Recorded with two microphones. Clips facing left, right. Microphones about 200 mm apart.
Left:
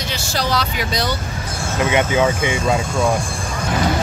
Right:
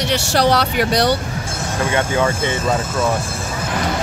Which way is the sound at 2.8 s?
5° right (ahead or behind).